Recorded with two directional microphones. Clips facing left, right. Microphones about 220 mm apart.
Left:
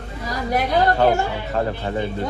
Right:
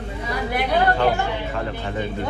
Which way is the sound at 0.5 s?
40° left (ahead or behind).